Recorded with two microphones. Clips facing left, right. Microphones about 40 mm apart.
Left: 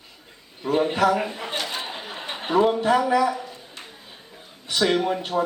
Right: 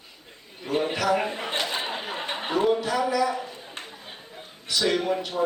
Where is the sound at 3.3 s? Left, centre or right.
Centre.